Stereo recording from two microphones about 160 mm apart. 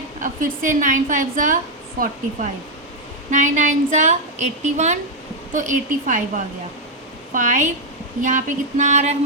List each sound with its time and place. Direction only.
0.2 s a woman's voice: 55° right (ahead or behind)
3.2 s a woman's voice: 50° right (ahead or behind)